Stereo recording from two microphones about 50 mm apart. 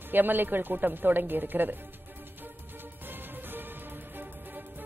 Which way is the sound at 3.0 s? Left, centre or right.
Right.